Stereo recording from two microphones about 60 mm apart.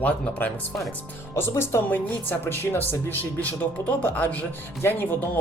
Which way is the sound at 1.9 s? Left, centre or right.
Left.